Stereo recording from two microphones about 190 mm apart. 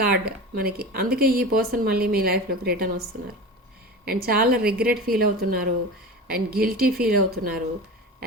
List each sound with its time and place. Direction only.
0.0 s speech: 55° right (ahead or behind)